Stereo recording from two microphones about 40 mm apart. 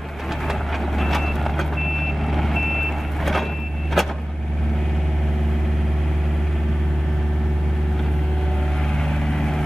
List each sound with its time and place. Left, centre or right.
0.5 s reversing beeps: centre
4.0 s vehicle: centre
9.3 s vehicle: centre